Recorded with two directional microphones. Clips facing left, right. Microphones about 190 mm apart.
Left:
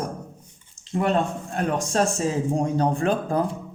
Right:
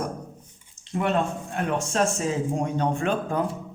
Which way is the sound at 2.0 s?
35° left (ahead or behind).